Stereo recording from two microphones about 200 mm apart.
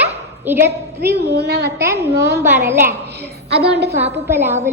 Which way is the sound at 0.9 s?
55° right (ahead or behind).